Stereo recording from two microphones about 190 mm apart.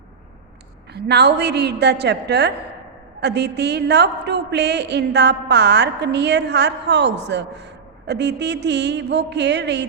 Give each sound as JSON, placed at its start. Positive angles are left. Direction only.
{"t": 0.9, "sound": "a woman's voice", "side_deg": -60}